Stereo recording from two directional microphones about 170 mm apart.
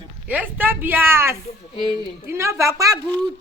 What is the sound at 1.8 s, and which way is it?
Speech, 30° left (ahead or behind).